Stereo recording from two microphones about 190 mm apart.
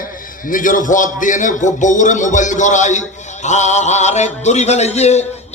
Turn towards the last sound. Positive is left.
turn(degrees=35)  # may be behind; listen again after turning